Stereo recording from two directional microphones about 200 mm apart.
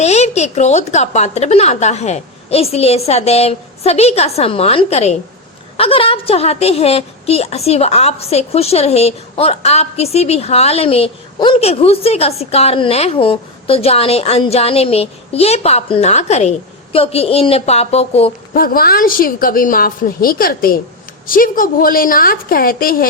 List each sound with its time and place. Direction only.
0.0 s a woman's voice: 35° left (ahead or behind)
18.5 s a woman's voice: 45° left (ahead or behind)